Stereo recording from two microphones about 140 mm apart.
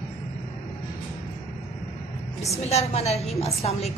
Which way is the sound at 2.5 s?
50° left (ahead or behind).